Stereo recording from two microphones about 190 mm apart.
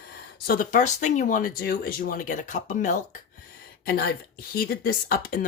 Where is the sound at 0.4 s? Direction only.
50° left (ahead or behind).